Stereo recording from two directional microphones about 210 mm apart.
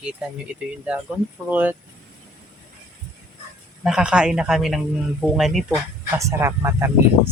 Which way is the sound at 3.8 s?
5° right (ahead or behind).